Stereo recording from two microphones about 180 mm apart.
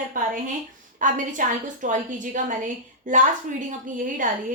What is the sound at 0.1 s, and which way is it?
A woman's voice, 50° right (ahead or behind).